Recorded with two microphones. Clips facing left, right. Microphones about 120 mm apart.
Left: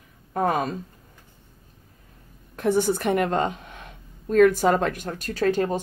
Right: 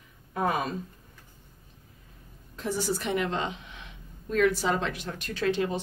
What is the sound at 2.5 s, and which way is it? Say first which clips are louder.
A woman's voice: left 8 dB; 55° left (ahead or behind).